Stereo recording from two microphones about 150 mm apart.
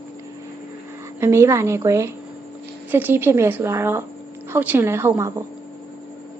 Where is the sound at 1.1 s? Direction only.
15° right (ahead or behind).